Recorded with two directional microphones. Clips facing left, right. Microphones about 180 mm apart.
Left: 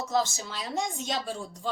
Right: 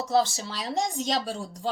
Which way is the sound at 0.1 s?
35° right (ahead or behind).